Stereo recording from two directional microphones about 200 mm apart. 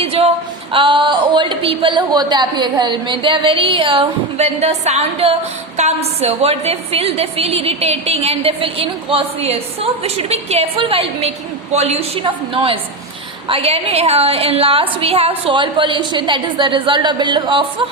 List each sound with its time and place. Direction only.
0.0 s speech: 30° right (ahead or behind)